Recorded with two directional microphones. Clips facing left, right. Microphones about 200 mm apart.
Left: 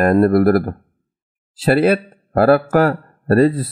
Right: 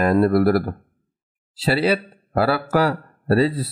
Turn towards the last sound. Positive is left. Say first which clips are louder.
# left 5 dB
turn(degrees=50)  # may be behind; listen again after turning